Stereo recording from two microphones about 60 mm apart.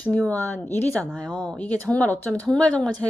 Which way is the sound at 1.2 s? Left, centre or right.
Centre.